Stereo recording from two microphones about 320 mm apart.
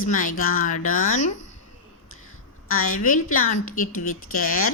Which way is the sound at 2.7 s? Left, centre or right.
Left.